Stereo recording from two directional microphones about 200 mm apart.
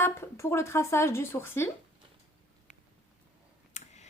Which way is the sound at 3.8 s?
35° left (ahead or behind).